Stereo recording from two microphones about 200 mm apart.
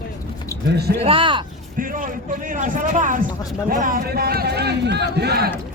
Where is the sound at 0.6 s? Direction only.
55° right (ahead or behind).